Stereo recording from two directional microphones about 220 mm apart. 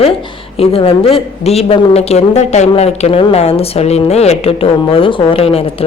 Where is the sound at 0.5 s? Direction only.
25° left (ahead or behind).